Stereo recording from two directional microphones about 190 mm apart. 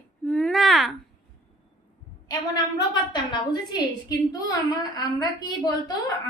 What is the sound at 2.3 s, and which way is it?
A woman's voice, 20° left (ahead or behind).